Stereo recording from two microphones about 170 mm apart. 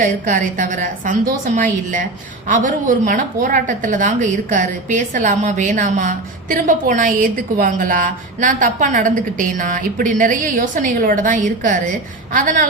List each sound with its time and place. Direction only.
0.0 s a woman's voice: 50° right (ahead or behind)